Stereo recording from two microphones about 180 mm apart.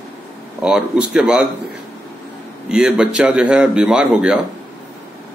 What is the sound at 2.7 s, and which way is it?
Speech, 5° right (ahead or behind).